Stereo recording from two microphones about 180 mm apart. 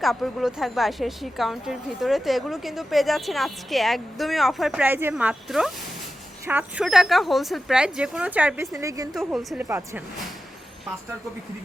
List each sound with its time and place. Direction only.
0.0 s a woman's voice: centre (ahead or behind)
8.7 s speech: 20° right (ahead or behind)
9.1 s a woman's voice: centre (ahead or behind)
9.6 s speech: 15° right (ahead or behind)